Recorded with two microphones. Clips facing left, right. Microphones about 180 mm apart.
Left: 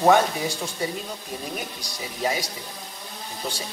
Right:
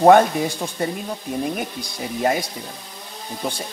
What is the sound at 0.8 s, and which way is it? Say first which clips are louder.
Speech: right 6 dB; 55° right (ahead or behind).